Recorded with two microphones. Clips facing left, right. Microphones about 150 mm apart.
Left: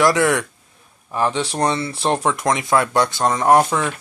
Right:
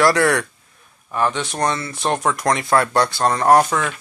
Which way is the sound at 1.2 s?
30° left (ahead or behind).